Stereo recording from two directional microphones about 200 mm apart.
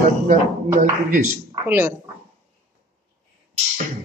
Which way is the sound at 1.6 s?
10° right (ahead or behind).